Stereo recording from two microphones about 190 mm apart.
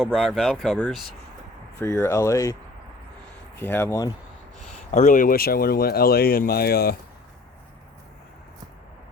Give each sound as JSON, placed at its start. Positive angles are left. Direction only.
{"t": 0.0, "sound": "speech", "side_deg": 0}
{"t": 1.8, "sound": "speech", "side_deg": 15}
{"t": 3.6, "sound": "speech", "side_deg": 10}
{"t": 4.9, "sound": "speech", "side_deg": 40}